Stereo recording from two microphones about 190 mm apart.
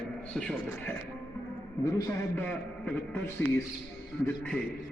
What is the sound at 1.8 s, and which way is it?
A man's voice, 15° left (ahead or behind).